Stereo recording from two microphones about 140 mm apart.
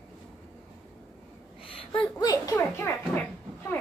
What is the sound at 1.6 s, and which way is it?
Speech, 40° left (ahead or behind).